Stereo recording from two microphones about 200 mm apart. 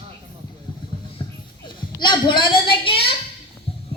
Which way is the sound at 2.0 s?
25° left (ahead or behind).